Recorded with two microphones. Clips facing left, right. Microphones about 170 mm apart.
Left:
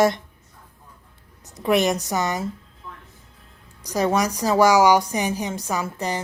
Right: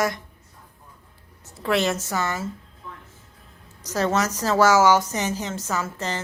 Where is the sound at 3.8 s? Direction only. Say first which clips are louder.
Left 2 dB; 15° left (ahead or behind).